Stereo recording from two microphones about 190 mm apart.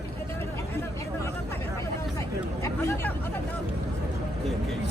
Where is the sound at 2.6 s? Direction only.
10° left (ahead or behind).